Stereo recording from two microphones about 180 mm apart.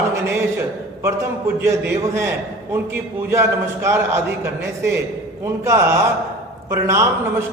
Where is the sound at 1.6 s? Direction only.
10° right (ahead or behind).